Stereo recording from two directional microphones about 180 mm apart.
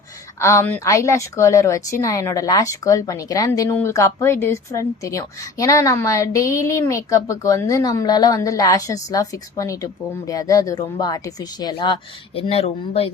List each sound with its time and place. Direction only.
0.3 s a woman's voice: 15° left (ahead or behind); by 13.1 s 35° left (ahead or behind)